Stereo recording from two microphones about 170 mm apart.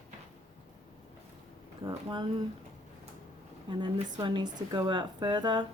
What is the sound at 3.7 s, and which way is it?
A woman's voice, 25° right (ahead or behind).